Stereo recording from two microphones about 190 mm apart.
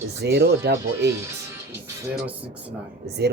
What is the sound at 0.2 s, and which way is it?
Speech, 60° right (ahead or behind).